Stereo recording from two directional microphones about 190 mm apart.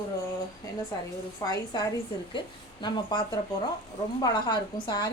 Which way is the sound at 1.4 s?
20° left (ahead or behind).